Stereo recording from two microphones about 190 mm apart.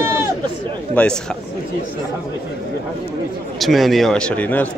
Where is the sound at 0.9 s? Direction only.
5° left (ahead or behind).